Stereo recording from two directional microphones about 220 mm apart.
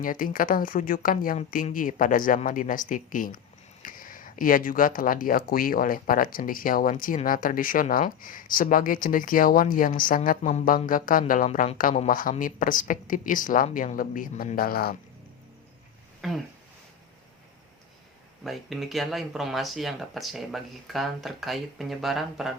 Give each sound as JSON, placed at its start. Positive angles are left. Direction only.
{"t": 0.0, "sound": "speech", "side_deg": 40}
{"t": 16.2, "sound": "speech", "side_deg": 0}
{"t": 18.4, "sound": "speech", "side_deg": 0}